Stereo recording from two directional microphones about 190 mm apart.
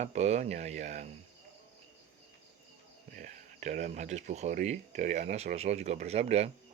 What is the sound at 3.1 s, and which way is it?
Speech, 40° right (ahead or behind).